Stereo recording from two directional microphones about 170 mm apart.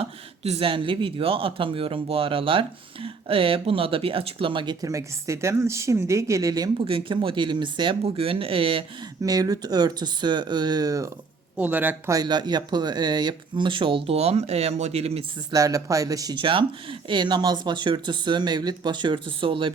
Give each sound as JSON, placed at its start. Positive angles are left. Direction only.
{"t": 0.0, "sound": "speech", "side_deg": -35}
{"t": 6.8, "sound": "speech", "side_deg": -30}
{"t": 9.2, "sound": "speech", "side_deg": -20}
{"t": 11.5, "sound": "speech", "side_deg": -10}
{"t": 15.5, "sound": "speech", "side_deg": -20}